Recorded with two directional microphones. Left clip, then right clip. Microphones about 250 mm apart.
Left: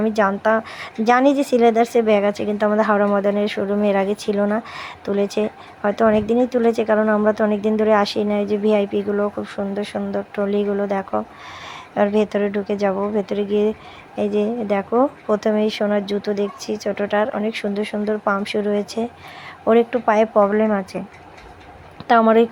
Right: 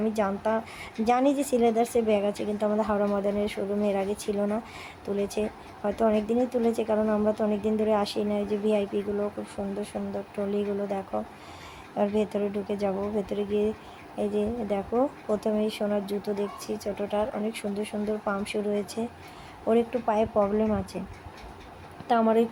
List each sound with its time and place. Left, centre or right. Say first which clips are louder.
0.0 s a woman's voice: left 9 dB; centre
22.0 s a woman's voice: left 9 dB; centre